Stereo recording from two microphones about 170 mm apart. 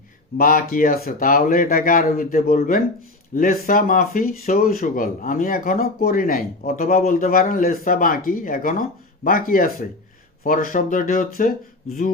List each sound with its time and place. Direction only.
0.3 s speech: 55° left (ahead or behind)